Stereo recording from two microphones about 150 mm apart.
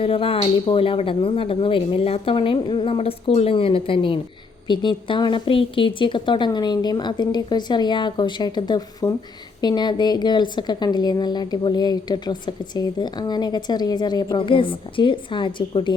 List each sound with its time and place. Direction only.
0.0 s a woman's voice: 40° left (ahead or behind)